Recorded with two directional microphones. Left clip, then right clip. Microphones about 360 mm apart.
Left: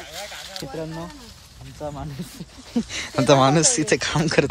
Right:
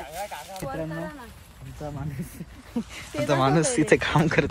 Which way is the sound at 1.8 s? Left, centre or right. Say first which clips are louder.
Left 5 dB; centre.